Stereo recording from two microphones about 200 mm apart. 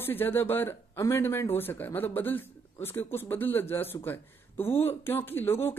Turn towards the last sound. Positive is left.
turn(degrees=10)  # may be behind; listen again after turning